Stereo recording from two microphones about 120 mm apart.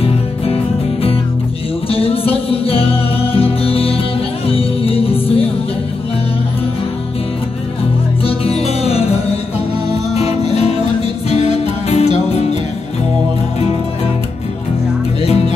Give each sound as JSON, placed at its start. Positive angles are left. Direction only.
{"t": 1.9, "sound": "music", "side_deg": 55}
{"t": 8.2, "sound": "music", "side_deg": 55}
{"t": 10.1, "sound": "music", "side_deg": 60}
{"t": 15.2, "sound": "music", "side_deg": 65}